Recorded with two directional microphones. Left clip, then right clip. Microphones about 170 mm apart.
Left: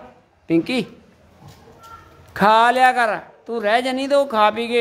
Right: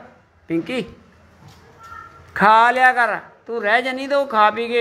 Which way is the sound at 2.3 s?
25° left (ahead or behind).